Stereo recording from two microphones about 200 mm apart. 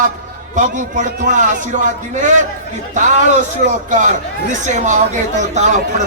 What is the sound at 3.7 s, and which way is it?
A man's voice, 40° right (ahead or behind).